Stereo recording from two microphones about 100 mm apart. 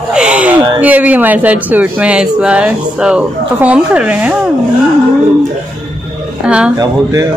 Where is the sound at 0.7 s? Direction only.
15° right (ahead or behind).